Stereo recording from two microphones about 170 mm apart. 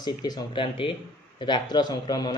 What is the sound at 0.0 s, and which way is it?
A man's voice, 25° left (ahead or behind).